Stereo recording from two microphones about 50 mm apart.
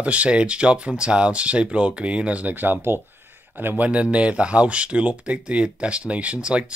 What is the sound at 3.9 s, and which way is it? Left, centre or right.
Speech, right.